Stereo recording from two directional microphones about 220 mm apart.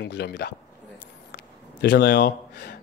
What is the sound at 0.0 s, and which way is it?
Speech, 50° left (ahead or behind).